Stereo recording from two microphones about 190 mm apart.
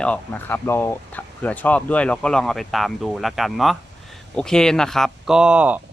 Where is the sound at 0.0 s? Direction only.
10° left (ahead or behind).